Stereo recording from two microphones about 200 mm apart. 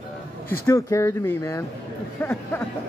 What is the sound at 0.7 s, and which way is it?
Speech, 15° left (ahead or behind).